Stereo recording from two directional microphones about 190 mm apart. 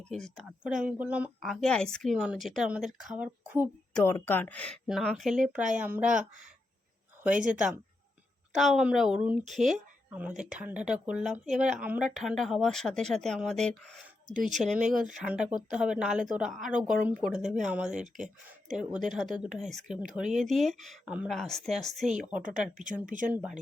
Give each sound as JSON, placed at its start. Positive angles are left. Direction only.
{"t": 0.1, "sound": "speech", "side_deg": 0}
{"t": 3.9, "sound": "speech", "side_deg": 10}
{"t": 8.5, "sound": "speech", "side_deg": 0}
{"t": 22.4, "sound": "speech", "side_deg": -40}
{"t": 23.3, "sound": "speech", "side_deg": -5}